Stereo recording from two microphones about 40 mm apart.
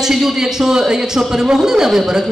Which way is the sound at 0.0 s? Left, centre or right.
Centre.